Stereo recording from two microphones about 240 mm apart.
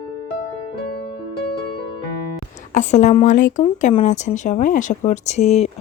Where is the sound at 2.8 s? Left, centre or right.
Left.